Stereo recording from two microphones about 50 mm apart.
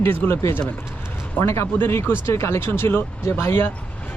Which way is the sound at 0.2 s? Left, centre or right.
Left.